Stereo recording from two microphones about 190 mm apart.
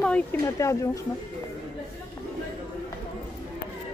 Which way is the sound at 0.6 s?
15° left (ahead or behind).